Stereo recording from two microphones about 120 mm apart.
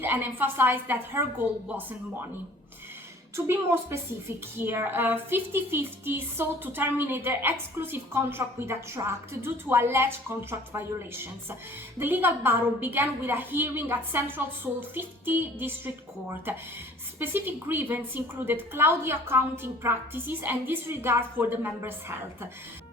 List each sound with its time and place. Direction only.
0.0 s a woman's voice: 15° right (ahead or behind)
3.3 s a woman's voice: 20° right (ahead or behind)
17.2 s a woman's voice: 20° right (ahead or behind)